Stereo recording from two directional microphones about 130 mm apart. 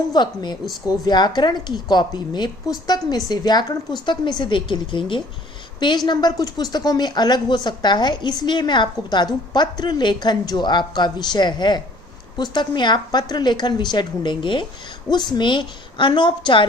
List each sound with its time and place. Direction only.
0.1 s a woman's voice: 35° left (ahead or behind)